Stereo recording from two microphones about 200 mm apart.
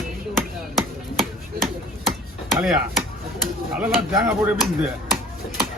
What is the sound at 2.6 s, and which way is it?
Speech, centre (ahead or behind).